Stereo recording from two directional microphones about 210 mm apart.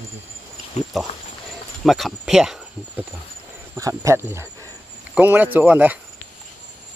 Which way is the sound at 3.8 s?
15° right (ahead or behind).